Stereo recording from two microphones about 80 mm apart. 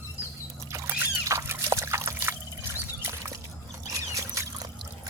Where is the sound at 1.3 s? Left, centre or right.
Right.